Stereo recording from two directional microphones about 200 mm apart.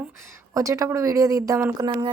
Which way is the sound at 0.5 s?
15° right (ahead or behind).